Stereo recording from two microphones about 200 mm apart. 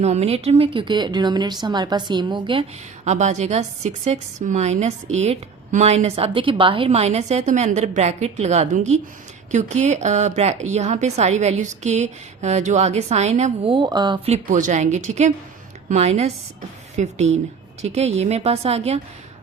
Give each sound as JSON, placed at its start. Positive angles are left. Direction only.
{"t": 0.0, "sound": "speech", "side_deg": -35}
{"t": 14.3, "sound": "speech", "side_deg": -40}